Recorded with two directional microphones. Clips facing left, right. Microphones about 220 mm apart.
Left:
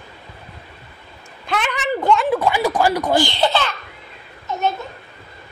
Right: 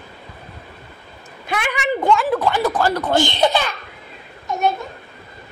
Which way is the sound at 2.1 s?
Centre (ahead or behind).